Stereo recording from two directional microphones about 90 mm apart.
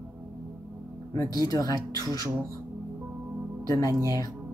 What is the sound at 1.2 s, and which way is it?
Speech, 45° left (ahead or behind).